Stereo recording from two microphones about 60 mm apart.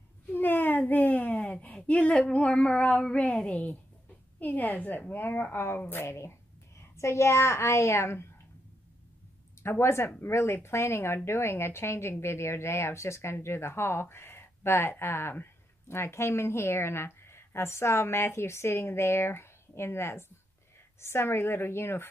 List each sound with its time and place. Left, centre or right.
0.3 s a sound: left
1.6 s female singing: left
5.1 s a woman's voice: left
9.6 s a woman's voice: left